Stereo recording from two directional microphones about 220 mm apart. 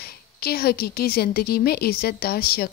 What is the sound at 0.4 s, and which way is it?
A woman's voice, 45° left (ahead or behind).